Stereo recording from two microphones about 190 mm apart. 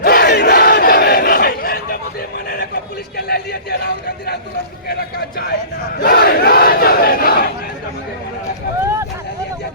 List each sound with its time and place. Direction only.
0.0 s battle cry: 60° left (ahead or behind)
3.2 s a sound: 55° left (ahead or behind)
4.9 s battle cry: 55° left (ahead or behind)